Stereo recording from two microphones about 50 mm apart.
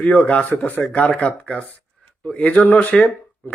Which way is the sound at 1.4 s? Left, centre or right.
Centre.